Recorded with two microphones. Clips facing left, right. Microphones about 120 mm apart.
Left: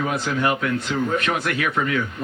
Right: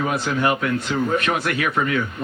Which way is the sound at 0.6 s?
50° right (ahead or behind).